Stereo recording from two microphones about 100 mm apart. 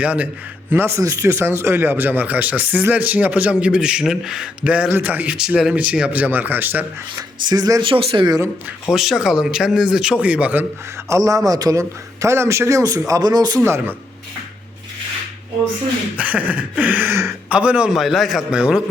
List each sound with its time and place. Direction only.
0.0 s speech: 15° right (ahead or behind)
0.7 s speech: 25° right (ahead or behind)
7.2 s a man's voice: 40° right (ahead or behind)
7.8 s speech: 60° right (ahead or behind)
8.9 s a man's voice: 5° right (ahead or behind)
11.1 s a man's voice: 35° right (ahead or behind)
13.6 s speech: 20° right (ahead or behind)
16.1 s speech: 15° right (ahead or behind)
18.0 s a man's voice: centre (ahead or behind)